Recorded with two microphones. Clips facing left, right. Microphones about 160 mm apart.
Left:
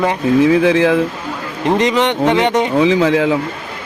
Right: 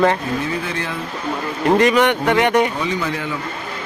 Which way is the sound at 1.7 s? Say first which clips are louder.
Even; 20° left (ahead or behind).